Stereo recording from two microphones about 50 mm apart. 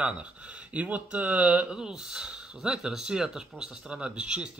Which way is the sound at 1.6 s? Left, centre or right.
Centre.